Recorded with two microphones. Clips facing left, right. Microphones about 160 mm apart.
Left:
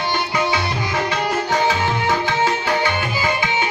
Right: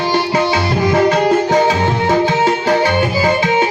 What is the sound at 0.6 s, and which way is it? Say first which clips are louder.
Music: right 10 dB; 50° right (ahead or behind).